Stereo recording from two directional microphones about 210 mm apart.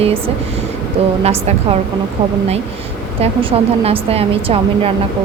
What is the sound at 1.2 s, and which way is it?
Speech, 30° right (ahead or behind).